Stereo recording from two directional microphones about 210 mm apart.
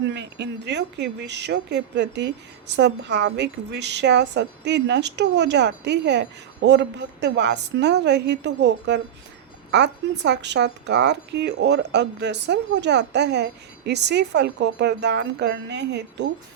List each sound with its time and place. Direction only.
0.1 s speech: 55° right (ahead or behind)